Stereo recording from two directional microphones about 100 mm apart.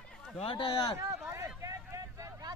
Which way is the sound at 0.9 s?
30° right (ahead or behind).